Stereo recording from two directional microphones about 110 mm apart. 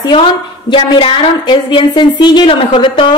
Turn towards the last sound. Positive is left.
turn(degrees=45)  # may be behind; listen again after turning